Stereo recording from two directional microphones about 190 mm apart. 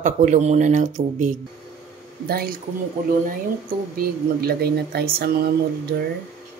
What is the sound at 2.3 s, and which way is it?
Speech, 55° right (ahead or behind).